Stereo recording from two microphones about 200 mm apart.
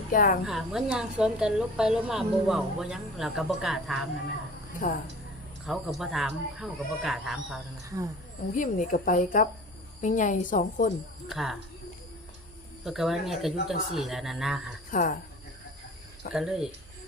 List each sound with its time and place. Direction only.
0.1 s a woman's voice: 45° left (ahead or behind)
0.4 s a woman's voice: 5° right (ahead or behind)
4.8 s speech: 40° left (ahead or behind)
5.6 s a woman's voice: centre (ahead or behind)
8.5 s speech: 40° left (ahead or behind)
11.3 s a woman's voice: centre (ahead or behind)
12.8 s a woman's voice: centre (ahead or behind)
14.8 s speech: 45° left (ahead or behind)
16.3 s a woman's voice: centre (ahead or behind)